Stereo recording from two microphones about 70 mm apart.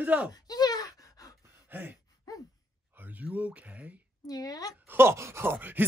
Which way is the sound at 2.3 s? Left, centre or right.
Left.